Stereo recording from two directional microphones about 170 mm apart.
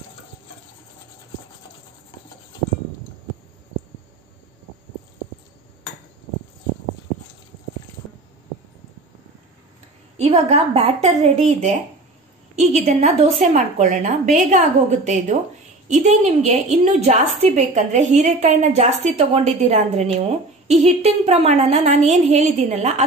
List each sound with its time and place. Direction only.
10.1 s a woman's voice: 40° right (ahead or behind)